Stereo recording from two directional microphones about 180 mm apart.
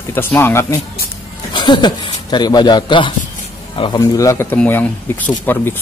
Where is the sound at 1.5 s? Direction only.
25° left (ahead or behind).